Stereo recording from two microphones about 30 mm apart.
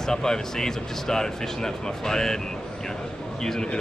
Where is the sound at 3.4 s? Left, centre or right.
Centre.